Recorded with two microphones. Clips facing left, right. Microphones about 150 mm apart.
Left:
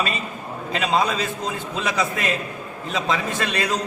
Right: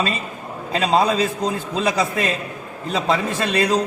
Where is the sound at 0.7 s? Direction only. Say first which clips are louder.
Right 4 dB; 35° right (ahead or behind).